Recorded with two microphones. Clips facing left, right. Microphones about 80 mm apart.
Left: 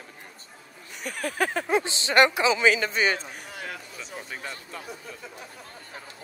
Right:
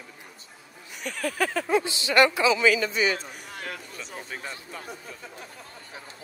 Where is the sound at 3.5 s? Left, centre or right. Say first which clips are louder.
Right 1 dB; right.